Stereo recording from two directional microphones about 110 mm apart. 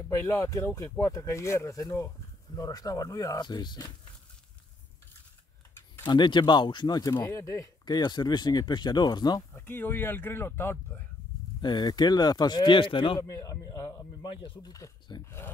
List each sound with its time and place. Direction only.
0.3 s speech: 30° left (ahead or behind)
6.0 s speech: 45° left (ahead or behind)
9.5 s speech: 20° left (ahead or behind)
11.6 s speech: 40° left (ahead or behind)
13.2 s speech: 35° left (ahead or behind)
14.3 s speech: 45° left (ahead or behind)